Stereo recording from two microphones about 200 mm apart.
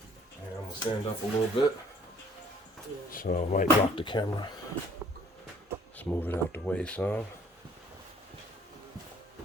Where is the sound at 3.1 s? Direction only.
45° left (ahead or behind).